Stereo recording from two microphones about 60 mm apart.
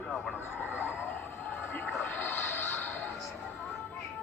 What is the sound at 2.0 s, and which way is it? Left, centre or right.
Music, left.